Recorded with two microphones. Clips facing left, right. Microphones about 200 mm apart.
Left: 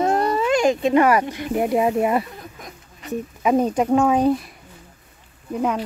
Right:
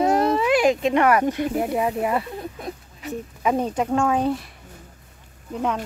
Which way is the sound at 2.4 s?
30° right (ahead or behind).